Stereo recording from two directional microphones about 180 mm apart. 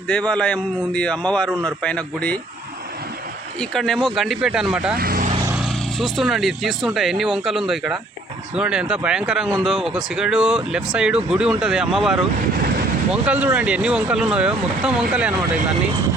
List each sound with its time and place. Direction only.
0.1 s a man's voice: 5° left (ahead or behind)
3.6 s speech: centre (ahead or behind)
4.9 s vehicle: 55° right (ahead or behind)
5.5 s speech: 5° right (ahead or behind)